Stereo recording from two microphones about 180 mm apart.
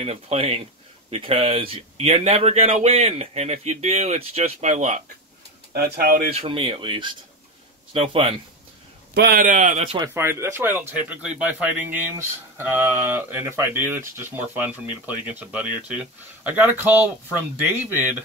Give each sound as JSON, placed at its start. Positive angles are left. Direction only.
{"t": 0.0, "sound": "speech", "side_deg": -35}
{"t": 5.7, "sound": "speech", "side_deg": -60}
{"t": 6.3, "sound": "speech", "side_deg": -30}
{"t": 9.1, "sound": "a man's voice", "side_deg": -65}
{"t": 9.4, "sound": "speech", "side_deg": -45}
{"t": 9.9, "sound": "speech", "side_deg": -15}